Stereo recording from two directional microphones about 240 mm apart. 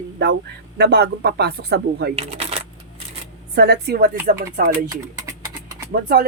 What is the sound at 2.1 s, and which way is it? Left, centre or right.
Speech, right.